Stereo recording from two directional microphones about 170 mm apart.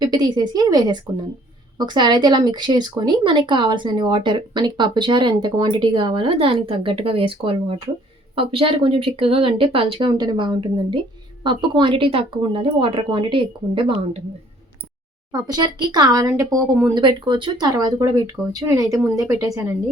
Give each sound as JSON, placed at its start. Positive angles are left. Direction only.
{"t": 0.0, "sound": "speech", "side_deg": -25}
{"t": 15.3, "sound": "a woman's voice", "side_deg": -25}
{"t": 16.9, "sound": "speech", "side_deg": -25}